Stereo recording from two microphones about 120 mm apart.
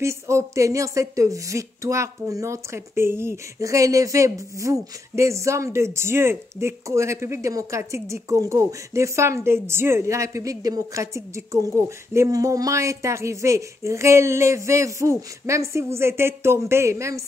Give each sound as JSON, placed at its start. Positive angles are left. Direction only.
{"t": 0.0, "sound": "a woman's voice", "side_deg": -25}